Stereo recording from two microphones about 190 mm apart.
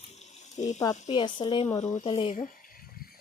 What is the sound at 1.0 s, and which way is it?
Speech, 25° left (ahead or behind).